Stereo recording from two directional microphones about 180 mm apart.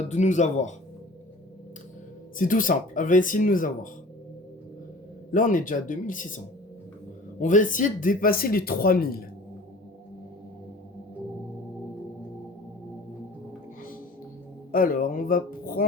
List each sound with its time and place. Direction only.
0.1 s speech: 40° left (ahead or behind)
2.5 s speech: 50° left (ahead or behind)
5.3 s speech: 50° left (ahead or behind)
14.7 s speech: 50° left (ahead or behind)